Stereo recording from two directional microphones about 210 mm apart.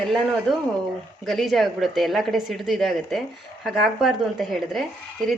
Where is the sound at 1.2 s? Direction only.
Centre (ahead or behind).